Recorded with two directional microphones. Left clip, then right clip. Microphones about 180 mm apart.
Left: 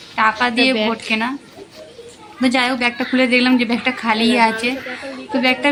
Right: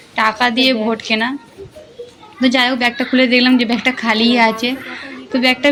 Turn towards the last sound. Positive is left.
turn(degrees=-5)  # may be behind; listen again after turning